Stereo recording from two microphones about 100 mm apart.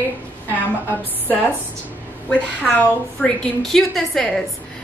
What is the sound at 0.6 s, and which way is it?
A woman's voice, 20° left (ahead or behind).